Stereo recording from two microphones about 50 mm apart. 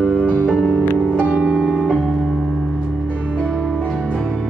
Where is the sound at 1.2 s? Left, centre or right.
Right.